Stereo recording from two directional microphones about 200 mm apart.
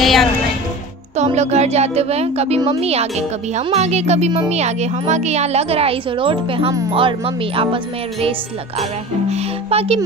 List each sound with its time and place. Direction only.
0.0 s music: centre (ahead or behind)
1.1 s a child's voice: 35° right (ahead or behind)